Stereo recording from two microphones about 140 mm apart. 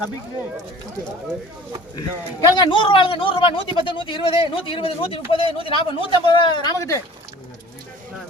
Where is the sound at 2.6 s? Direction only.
35° left (ahead or behind).